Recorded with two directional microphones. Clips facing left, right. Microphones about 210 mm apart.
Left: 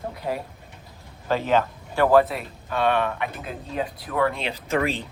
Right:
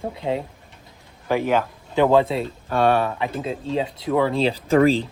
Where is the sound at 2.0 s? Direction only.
25° right (ahead or behind).